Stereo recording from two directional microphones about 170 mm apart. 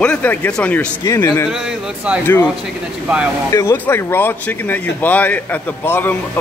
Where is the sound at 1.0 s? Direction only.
20° left (ahead or behind).